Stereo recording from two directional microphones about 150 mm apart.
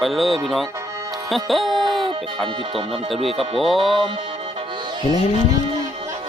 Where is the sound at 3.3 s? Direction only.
40° right (ahead or behind).